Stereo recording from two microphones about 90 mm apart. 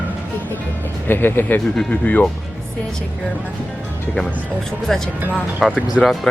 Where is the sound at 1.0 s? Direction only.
25° left (ahead or behind).